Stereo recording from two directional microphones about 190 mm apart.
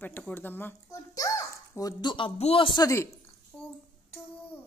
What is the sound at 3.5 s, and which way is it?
Speech, 5° left (ahead or behind).